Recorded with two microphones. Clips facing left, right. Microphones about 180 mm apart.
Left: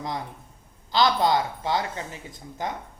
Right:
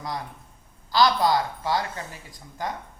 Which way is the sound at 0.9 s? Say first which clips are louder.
Right 1 dB; 25° left (ahead or behind).